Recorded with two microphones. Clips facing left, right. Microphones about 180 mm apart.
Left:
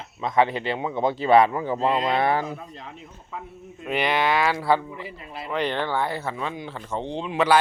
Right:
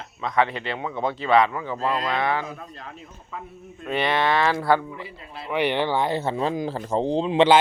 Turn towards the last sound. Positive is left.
turn(degrees=-25)  # may be behind; listen again after turning